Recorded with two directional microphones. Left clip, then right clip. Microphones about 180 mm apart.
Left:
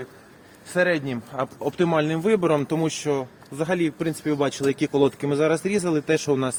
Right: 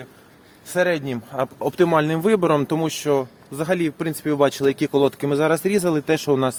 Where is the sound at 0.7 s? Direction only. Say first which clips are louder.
Right 1 dB; 70° right (ahead or behind).